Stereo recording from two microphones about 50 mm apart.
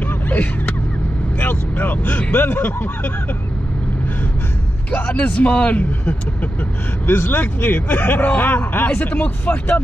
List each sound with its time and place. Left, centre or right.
0.1 s a sound: left
1.4 s speech: left
4.9 s speech: left